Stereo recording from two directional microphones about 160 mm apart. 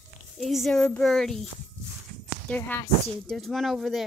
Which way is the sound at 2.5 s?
10° left (ahead or behind).